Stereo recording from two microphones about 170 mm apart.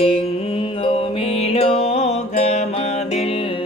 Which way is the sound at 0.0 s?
35° left (ahead or behind).